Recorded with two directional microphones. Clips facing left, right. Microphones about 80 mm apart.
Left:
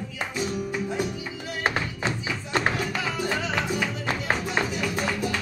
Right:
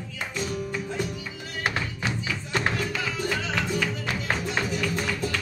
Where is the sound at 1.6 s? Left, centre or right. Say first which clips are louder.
Left 2 dB; left.